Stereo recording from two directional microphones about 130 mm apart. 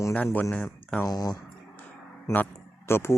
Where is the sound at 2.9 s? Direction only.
20° left (ahead or behind).